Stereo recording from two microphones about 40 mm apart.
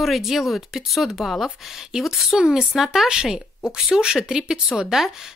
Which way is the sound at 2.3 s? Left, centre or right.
Right.